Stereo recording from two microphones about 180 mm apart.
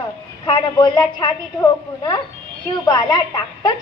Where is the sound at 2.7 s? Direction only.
20° left (ahead or behind).